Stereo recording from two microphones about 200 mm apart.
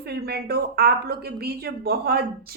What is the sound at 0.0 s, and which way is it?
A woman's voice, 50° right (ahead or behind).